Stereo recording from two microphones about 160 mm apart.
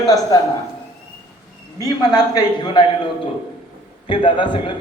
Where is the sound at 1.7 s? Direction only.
25° left (ahead or behind).